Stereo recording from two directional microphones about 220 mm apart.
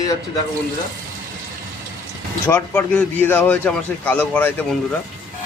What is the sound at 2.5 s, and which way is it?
A man's voice, 10° left (ahead or behind).